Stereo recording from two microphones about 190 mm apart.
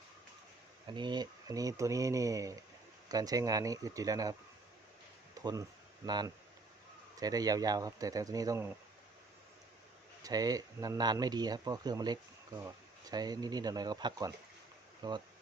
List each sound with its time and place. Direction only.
0.9 s speech: 25° right (ahead or behind)
5.4 s speech: 15° right (ahead or behind)
10.2 s speech: 20° right (ahead or behind)